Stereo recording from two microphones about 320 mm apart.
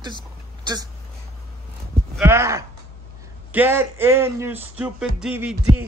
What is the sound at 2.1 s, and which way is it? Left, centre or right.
A man's voice, centre.